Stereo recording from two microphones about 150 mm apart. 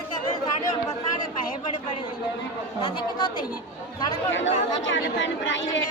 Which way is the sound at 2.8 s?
30° left (ahead or behind).